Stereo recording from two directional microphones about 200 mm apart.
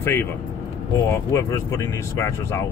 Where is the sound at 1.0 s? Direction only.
15° left (ahead or behind).